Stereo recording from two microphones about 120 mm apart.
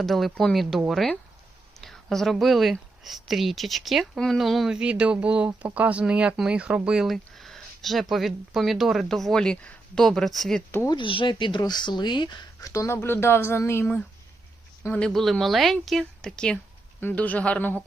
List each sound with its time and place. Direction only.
0.0 s speech: centre (ahead or behind)
10.8 s speech: 40° left (ahead or behind)
12.7 s speech: 25° left (ahead or behind)